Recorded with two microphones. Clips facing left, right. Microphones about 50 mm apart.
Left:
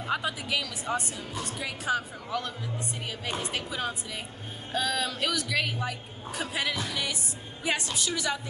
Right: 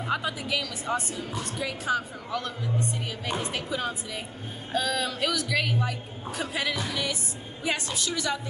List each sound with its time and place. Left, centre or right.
0.0 s speech: centre